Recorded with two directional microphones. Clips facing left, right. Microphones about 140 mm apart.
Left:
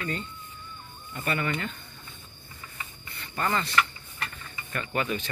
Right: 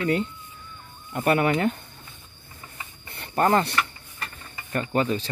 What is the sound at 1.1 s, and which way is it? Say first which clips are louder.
Speech: right 9 dB; 60° right (ahead or behind).